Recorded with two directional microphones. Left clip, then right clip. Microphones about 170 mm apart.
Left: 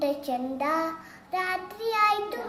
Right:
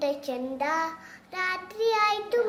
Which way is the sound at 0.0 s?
20° right (ahead or behind).